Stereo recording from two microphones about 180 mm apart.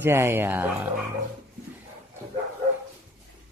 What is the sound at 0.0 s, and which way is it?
Speech, 15° right (ahead or behind).